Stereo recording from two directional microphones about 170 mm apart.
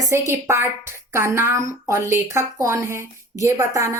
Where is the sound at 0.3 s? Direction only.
15° right (ahead or behind).